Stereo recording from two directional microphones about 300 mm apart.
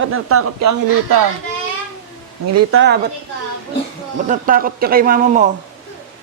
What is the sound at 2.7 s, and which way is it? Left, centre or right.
Speech, right.